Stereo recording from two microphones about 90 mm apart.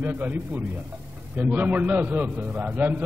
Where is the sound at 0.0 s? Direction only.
20° right (ahead or behind).